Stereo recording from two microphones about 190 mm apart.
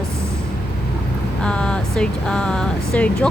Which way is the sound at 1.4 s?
5° left (ahead or behind).